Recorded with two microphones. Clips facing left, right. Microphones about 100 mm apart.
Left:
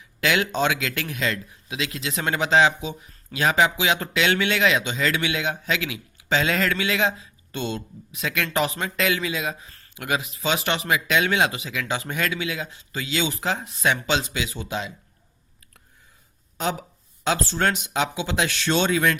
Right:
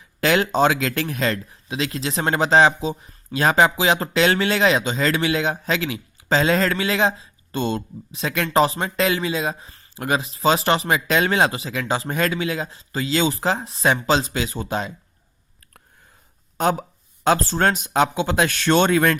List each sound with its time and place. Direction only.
0.2 s a man's voice: 40° right (ahead or behind)
16.6 s speech: 50° right (ahead or behind)